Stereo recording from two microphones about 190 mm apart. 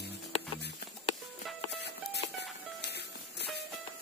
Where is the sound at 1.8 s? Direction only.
60° left (ahead or behind).